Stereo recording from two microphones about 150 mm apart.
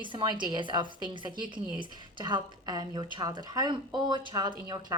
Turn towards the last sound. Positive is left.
turn(degrees=-30)  # may be behind; listen again after turning